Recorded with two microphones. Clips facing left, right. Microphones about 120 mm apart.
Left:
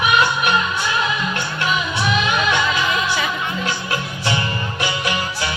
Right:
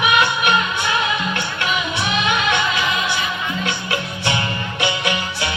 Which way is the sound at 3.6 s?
35° left (ahead or behind).